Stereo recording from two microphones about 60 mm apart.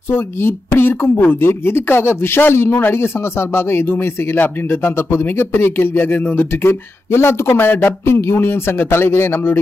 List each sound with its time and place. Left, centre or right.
0.1 s a man's voice: left